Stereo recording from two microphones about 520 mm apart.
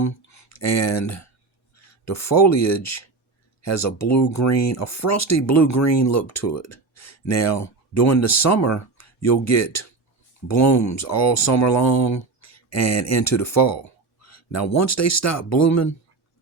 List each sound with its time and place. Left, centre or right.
0.0 s speech: left